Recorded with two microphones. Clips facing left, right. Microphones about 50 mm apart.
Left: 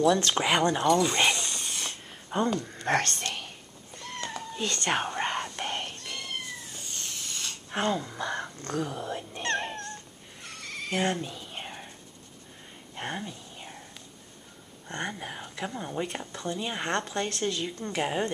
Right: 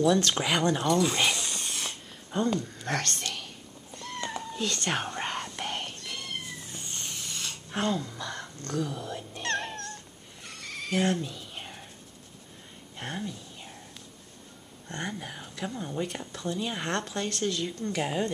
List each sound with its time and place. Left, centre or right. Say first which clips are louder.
0.0 s speech: left 1 dB; centre
2.2 s a sound: left 1 dB; centre
3.1 s speech: left 1 dB; centre
3.9 s cat: right 1 dB; centre
4.6 s cat: left 2 dB; centre
7.1 s a sound: even; centre
7.7 s speech: left 1 dB; centre
9.3 s dog: even; centre
10.4 s a sound: left 1 dB; centre
12.9 s whispering: left 1 dB; centre
14.9 s speech: left 1 dB; centre
15.1 s speech: left 1 dB; centre
16.2 s speech: right 1 dB; centre